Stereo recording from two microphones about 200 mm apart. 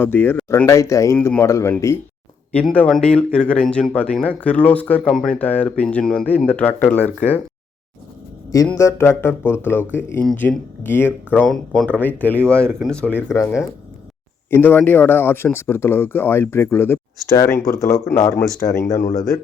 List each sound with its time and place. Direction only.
0.0 s speech: 10° left (ahead or behind)
8.5 s speech: 10° left (ahead or behind)